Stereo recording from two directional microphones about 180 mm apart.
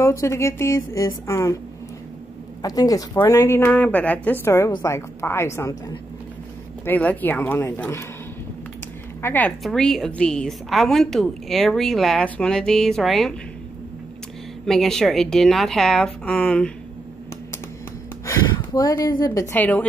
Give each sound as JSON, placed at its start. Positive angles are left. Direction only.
{"t": 0.0, "sound": "a woman's voice", "side_deg": 15}
{"t": 2.6, "sound": "a woman's voice", "side_deg": 20}
{"t": 6.8, "sound": "a woman's voice", "side_deg": 10}
{"t": 9.2, "sound": "a woman's voice", "side_deg": 10}
{"t": 14.7, "sound": "a woman's voice", "side_deg": 0}
{"t": 18.2, "sound": "speech", "side_deg": 20}